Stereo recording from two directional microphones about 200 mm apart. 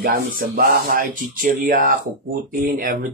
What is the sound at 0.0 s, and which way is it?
Speech, 45° right (ahead or behind).